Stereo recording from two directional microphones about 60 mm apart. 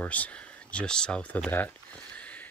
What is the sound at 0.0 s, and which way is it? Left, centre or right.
Speech, left.